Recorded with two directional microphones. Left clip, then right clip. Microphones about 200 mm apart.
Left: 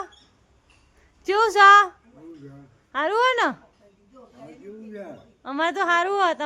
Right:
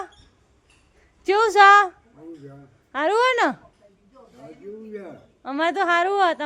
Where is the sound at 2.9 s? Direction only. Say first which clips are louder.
Right 1 dB; 15° right (ahead or behind).